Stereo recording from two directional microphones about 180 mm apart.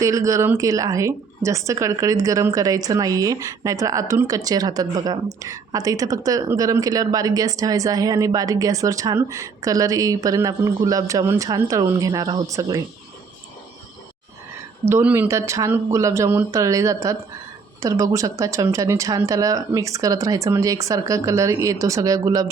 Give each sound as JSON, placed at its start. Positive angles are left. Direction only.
{"t": 0.0, "sound": "a woman's voice", "side_deg": -15}
{"t": 14.8, "sound": "speech", "side_deg": -15}